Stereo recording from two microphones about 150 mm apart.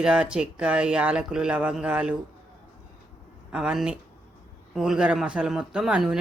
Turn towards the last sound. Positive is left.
turn(degrees=-5)  # may be behind; listen again after turning